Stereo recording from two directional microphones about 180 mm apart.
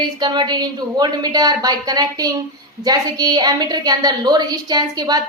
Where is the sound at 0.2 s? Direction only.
25° right (ahead or behind).